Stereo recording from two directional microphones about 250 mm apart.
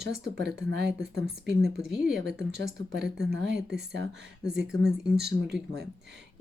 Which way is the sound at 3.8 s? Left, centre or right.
Right.